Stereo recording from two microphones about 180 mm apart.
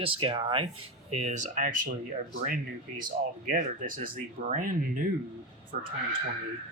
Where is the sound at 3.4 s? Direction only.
50° right (ahead or behind).